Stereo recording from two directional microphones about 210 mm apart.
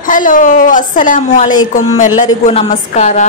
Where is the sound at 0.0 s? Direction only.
40° left (ahead or behind).